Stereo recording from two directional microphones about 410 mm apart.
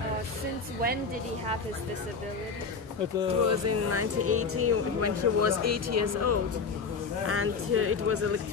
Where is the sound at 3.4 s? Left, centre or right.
Right.